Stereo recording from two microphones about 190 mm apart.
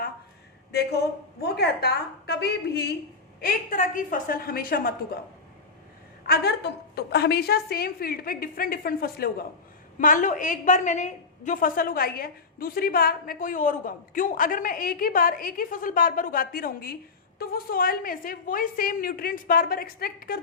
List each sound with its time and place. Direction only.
1.4 s a woman's voice: 55° left (ahead or behind)
3.4 s a woman's voice: 45° left (ahead or behind)
6.2 s a woman's voice: 55° left (ahead or behind)